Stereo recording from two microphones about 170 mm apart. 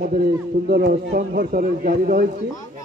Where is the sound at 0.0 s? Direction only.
55° right (ahead or behind).